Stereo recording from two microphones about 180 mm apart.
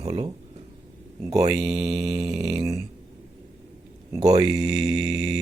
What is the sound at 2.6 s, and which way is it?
Speech, 20° right (ahead or behind).